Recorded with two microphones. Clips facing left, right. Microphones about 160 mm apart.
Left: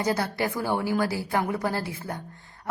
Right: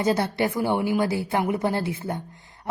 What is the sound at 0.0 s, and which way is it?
A woman's voice, 25° right (ahead or behind).